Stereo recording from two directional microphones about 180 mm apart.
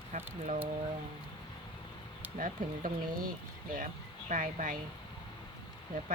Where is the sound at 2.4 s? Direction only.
50° right (ahead or behind).